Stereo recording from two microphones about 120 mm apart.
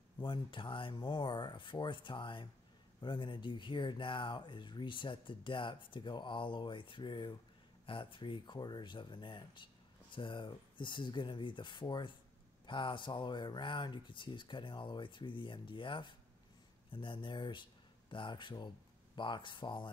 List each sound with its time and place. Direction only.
0.2 s speech: 40° left (ahead or behind)